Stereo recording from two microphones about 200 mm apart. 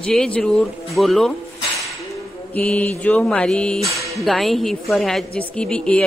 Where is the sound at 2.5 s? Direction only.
5° left (ahead or behind).